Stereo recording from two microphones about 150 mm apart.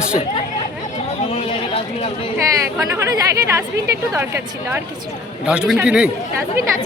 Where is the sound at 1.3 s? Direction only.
40° left (ahead or behind).